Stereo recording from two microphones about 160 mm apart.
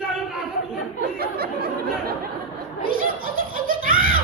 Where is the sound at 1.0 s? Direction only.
75° right (ahead or behind).